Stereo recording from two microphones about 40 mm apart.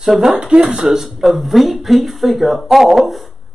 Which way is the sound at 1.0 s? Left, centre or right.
Centre.